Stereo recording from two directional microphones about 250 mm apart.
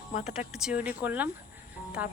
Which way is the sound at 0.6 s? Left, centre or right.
Centre.